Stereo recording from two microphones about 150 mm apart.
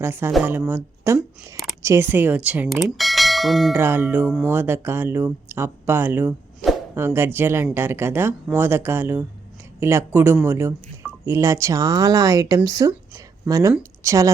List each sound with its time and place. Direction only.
0.0 s speech: 15° right (ahead or behind)
3.8 s speech: 15° right (ahead or behind)
13.1 s a sound: 25° right (ahead or behind)
14.0 s speech: 20° right (ahead or behind)